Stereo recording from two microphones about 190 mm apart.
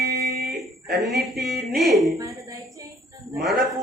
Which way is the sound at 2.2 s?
15° right (ahead or behind).